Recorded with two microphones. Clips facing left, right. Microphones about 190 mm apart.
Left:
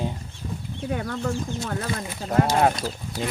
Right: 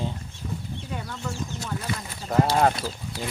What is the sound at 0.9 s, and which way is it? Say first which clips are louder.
Speech: left 8 dB; 60° left (ahead or behind).